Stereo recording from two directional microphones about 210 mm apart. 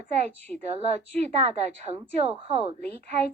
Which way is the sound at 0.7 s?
30° right (ahead or behind).